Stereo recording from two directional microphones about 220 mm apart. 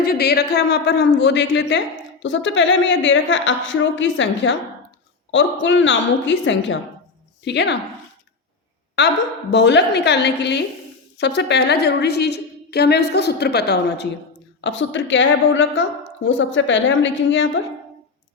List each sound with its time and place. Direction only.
0.0 s a woman's voice: 45° left (ahead or behind)
9.0 s a woman's voice: 50° left (ahead or behind)